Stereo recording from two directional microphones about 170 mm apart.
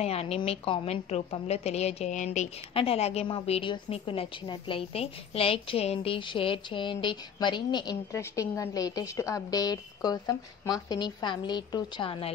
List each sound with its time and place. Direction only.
0.0 s a woman's voice: 35° left (ahead or behind)